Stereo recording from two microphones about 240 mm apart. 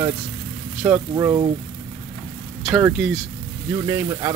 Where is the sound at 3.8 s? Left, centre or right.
Centre.